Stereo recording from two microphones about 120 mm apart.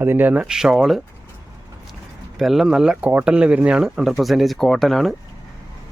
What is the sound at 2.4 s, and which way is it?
Speech, centre (ahead or behind).